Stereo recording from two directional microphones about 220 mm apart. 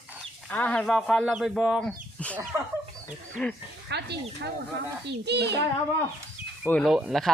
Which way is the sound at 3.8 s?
50° right (ahead or behind).